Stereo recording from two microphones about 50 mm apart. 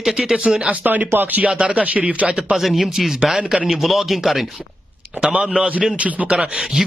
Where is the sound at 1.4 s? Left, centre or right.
Right.